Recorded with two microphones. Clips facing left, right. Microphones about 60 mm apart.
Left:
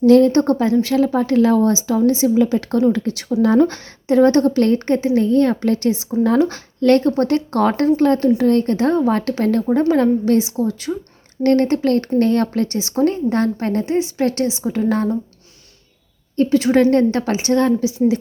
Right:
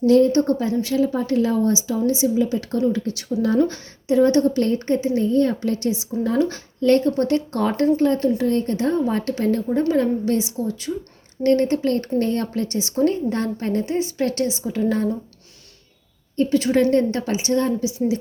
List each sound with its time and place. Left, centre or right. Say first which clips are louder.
0.0 s speech: left 4 dB; left
0.8 s speech: left 4 dB; left
1.9 s speech: left 5 dB; left
2.2 s speech: left 5 dB; left
6.4 s a woman's voice: left 3 dB; left
10.3 s a woman's voice: left 5 dB; left
11.4 s a woman's voice: left 3 dB; left
13.1 s a woman's voice: left 4 dB; left
14.2 s a woman's voice: left 3 dB; left
16.5 s a woman's voice: left 4 dB; left
16.9 s a woman's voice: left 4 dB; left
17.6 s speech: left 5 dB; left